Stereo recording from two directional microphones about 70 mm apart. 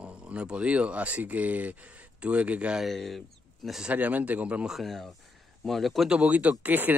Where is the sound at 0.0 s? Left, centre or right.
Centre.